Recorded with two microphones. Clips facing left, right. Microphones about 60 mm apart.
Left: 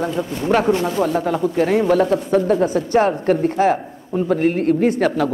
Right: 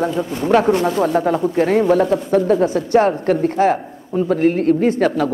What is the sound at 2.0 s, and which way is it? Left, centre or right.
Speech, right.